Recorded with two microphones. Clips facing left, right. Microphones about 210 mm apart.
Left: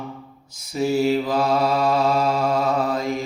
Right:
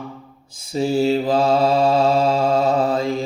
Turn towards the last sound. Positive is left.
turn(degrees=-30)  # may be behind; listen again after turning